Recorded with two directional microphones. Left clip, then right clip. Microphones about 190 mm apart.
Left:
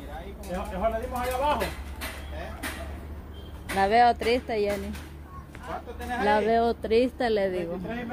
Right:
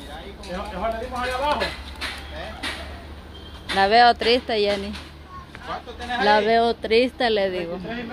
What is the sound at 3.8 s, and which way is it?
Speech, 10° right (ahead or behind).